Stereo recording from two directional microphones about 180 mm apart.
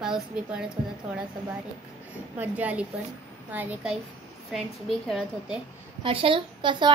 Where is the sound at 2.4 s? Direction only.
10° right (ahead or behind).